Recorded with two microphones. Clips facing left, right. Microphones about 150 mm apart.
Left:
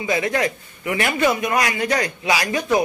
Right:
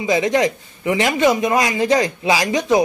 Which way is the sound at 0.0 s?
20° right (ahead or behind).